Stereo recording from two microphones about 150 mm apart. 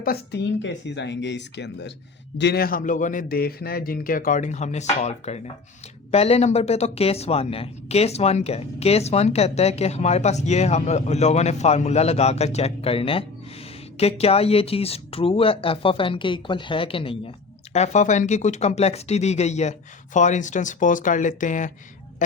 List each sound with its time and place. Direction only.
2.5 s a man's voice: 85° left; by 17.2 s 35° left (ahead or behind)
17.7 s a man's voice: 50° left (ahead or behind)